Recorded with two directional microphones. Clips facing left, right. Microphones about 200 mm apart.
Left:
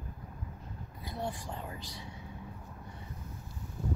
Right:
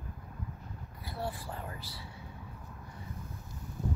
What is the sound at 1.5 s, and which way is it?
Speech, 20° left (ahead or behind).